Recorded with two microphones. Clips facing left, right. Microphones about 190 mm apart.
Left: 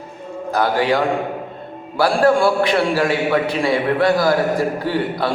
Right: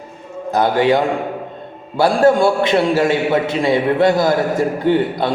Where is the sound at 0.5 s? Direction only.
20° right (ahead or behind).